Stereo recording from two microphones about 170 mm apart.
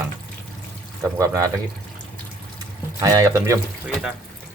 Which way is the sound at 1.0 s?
15° right (ahead or behind).